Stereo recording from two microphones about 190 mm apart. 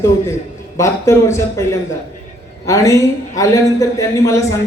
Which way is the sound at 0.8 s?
15° left (ahead or behind).